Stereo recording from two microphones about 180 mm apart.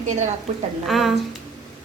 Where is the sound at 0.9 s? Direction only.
Centre (ahead or behind).